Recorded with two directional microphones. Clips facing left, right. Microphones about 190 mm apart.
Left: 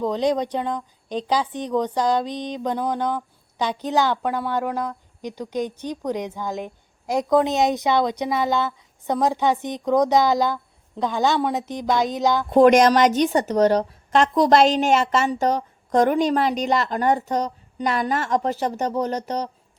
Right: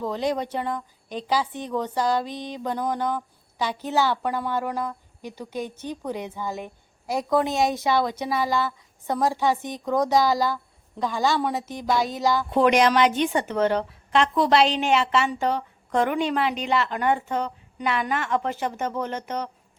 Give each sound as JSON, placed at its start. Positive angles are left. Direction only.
{"t": 0.0, "sound": "a woman's voice", "side_deg": 20}
{"t": 1.1, "sound": "a woman's voice", "side_deg": -5}
{"t": 1.5, "sound": "a woman's voice", "side_deg": 15}
{"t": 12.5, "sound": "a woman's voice", "side_deg": 45}